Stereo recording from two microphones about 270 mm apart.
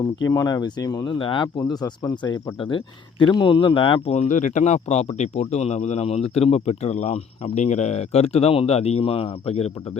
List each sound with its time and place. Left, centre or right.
0.3 s speech: centre